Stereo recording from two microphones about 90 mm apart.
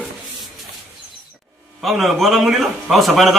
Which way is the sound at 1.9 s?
Centre (ahead or behind).